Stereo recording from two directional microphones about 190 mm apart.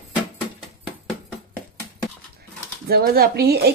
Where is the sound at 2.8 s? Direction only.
55° right (ahead or behind).